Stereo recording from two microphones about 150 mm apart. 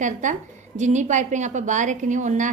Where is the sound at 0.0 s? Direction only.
55° right (ahead or behind).